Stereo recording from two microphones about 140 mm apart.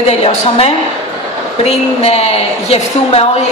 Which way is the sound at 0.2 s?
50° left (ahead or behind).